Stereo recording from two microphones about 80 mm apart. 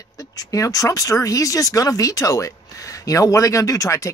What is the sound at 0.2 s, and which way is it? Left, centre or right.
Speech, left.